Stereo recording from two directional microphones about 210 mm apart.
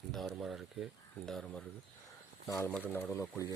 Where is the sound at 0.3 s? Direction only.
5° right (ahead or behind).